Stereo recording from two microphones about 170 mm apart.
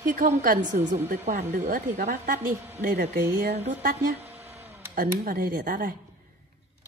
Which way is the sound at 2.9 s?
80° right.